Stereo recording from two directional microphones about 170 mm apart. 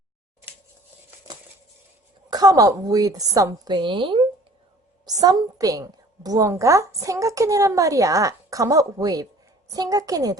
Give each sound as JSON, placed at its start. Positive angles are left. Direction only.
{"t": 2.3, "sound": "a woman's voice", "side_deg": -20}
{"t": 5.2, "sound": "a woman's voice", "side_deg": -20}